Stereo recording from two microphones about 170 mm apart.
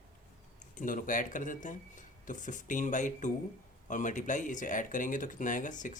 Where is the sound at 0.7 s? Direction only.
50° left (ahead or behind).